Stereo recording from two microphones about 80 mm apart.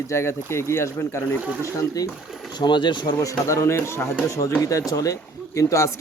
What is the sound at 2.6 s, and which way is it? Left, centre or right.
Speech, left.